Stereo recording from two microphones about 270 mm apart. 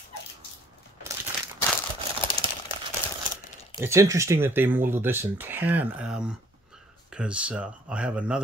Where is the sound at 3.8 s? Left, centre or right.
Centre.